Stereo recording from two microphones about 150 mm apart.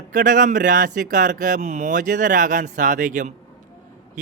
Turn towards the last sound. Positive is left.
turn(degrees=-60)  # may be behind; listen again after turning